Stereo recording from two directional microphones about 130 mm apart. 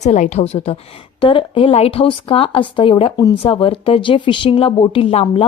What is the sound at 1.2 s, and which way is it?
A woman's voice, 40° left (ahead or behind).